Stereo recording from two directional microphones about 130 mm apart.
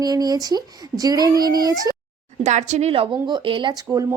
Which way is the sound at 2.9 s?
40° right (ahead or behind).